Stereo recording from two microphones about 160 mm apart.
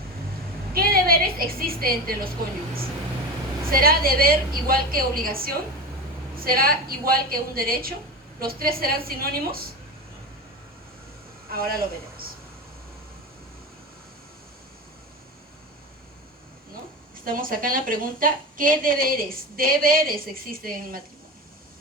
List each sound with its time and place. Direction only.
0.7 s a woman's voice: 70° right (ahead or behind)
3.7 s a woman's voice: 65° right (ahead or behind)
11.5 s speech: 70° right (ahead or behind)
17.2 s a woman's voice: 60° right (ahead or behind)